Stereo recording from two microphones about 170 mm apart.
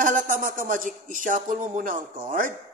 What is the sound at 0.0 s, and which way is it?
A man's voice, 50° right (ahead or behind).